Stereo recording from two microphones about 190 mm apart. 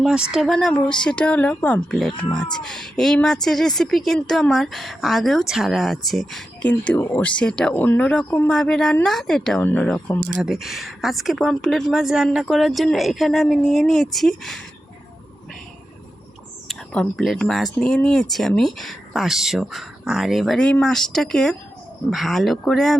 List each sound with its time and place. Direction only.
0.0 s speech: 5° right (ahead or behind)
16.6 s speech: 5° left (ahead or behind)